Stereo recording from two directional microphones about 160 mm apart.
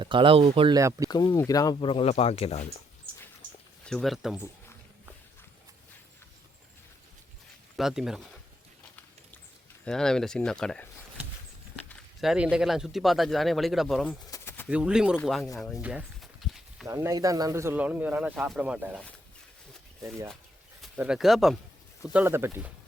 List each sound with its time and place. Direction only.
0.0 s speech: 30° right (ahead or behind)
0.8 s speech: 20° right (ahead or behind)
1.0 s speech: 25° left (ahead or behind)
3.1 s a sound: 35° right (ahead or behind)
3.8 s speech: centre (ahead or behind)
7.8 s speech: centre (ahead or behind)
9.8 s speech: 5° left (ahead or behind)
12.2 s speech: 5° right (ahead or behind)
14.3 s pigeon: 20° left (ahead or behind)
14.7 s speech: 5° right (ahead or behind)
15.8 s walk: 5° right (ahead or behind)
16.8 s speech: 20° right (ahead or behind)
20.8 s speech: 5° right (ahead or behind)